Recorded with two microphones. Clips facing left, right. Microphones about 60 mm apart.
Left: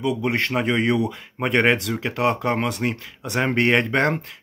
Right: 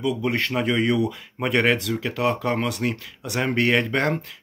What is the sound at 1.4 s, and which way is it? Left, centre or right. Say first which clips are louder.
Speech: left 2 dB; left.